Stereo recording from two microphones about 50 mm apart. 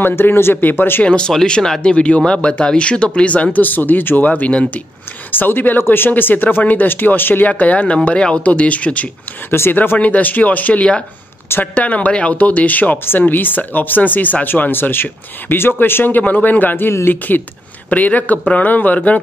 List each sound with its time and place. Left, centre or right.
0.0 s speech: left
1.0 s speech: left
3.5 s speech: left
4.2 s speech: left
5.3 s speech: left
9.5 s speech: left
9.9 s speech: left
13.0 s speech: left